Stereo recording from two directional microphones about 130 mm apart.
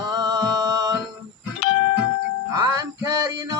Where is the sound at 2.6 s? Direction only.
30° right (ahead or behind).